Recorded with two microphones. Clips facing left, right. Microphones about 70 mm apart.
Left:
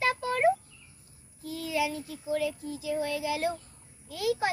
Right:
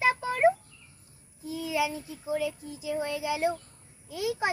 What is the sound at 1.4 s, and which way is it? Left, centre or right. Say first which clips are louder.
A child's voice: right 1 dB; centre.